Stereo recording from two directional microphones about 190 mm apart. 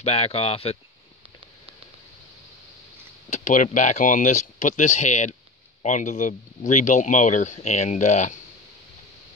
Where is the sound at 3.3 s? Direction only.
40° left (ahead or behind).